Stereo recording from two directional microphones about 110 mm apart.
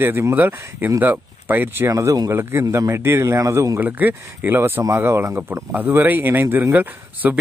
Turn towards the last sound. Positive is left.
turn(degrees=-15)  # may be behind; listen again after turning